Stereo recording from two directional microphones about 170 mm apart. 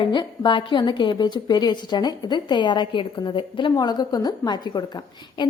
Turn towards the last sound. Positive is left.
turn(degrees=25)  # may be behind; listen again after turning